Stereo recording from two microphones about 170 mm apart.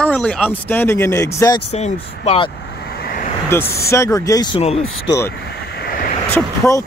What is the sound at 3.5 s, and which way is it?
Speech, 15° left (ahead or behind).